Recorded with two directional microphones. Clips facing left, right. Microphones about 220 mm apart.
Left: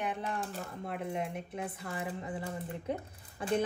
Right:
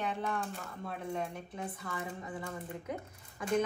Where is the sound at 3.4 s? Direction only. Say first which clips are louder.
Even; 30° left (ahead or behind).